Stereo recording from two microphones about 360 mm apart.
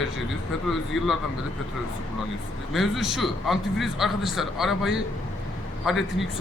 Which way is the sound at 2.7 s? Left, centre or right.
Centre.